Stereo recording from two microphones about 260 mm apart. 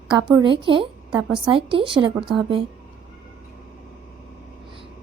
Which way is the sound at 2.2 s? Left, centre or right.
Centre.